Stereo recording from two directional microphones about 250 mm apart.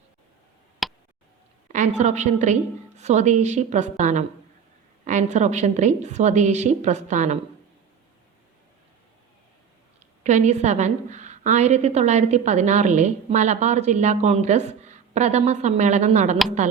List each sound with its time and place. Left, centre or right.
0.8 s tick: centre
1.6 s a woman's voice: right
10.2 s a woman's voice: right